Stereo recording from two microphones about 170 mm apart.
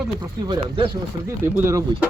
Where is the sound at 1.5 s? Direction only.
15° right (ahead or behind).